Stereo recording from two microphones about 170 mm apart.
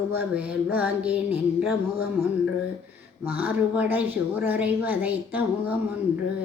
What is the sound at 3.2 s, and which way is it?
A woman's voice, 10° right (ahead or behind).